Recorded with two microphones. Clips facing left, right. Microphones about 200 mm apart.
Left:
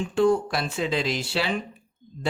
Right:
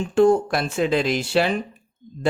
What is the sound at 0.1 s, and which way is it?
A woman's voice, 50° right (ahead or behind).